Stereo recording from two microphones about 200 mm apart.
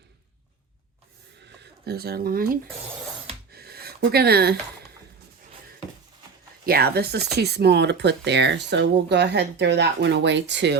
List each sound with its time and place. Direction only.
1.5 s speech: 50° right (ahead or behind)
3.5 s a sound: 50° right (ahead or behind)
6.7 s speech: 50° right (ahead or behind)